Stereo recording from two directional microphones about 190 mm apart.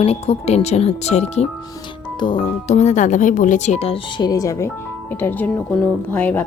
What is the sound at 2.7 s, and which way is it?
Speech, 40° left (ahead or behind).